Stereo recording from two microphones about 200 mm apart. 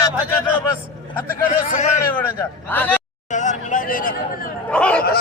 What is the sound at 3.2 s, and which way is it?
Speech, 40° left (ahead or behind).